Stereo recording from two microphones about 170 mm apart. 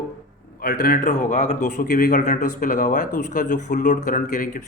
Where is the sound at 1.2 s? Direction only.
40° left (ahead or behind).